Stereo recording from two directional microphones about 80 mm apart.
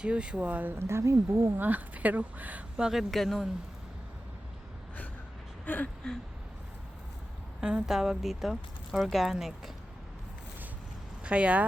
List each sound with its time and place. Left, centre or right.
0.0 s speech: centre; by 1.5 s right
1.5 s speech: right; by 3.5 s centre
5.6 s gasp: centre
7.6 s speech: centre
11.2 s speech: centre